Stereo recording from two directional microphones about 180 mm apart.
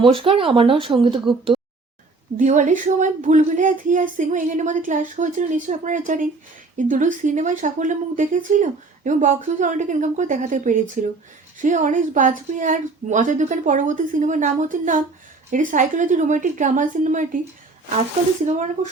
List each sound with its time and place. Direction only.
0.0 s speech: 30° right (ahead or behind)
2.4 s speech: 45° right (ahead or behind)
18.4 s speech: 45° right (ahead or behind)